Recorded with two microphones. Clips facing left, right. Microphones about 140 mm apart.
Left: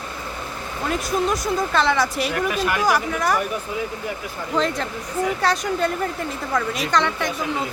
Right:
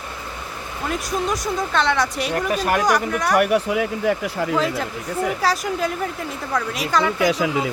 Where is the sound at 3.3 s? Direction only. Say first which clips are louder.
Right 7 dB; 80° right.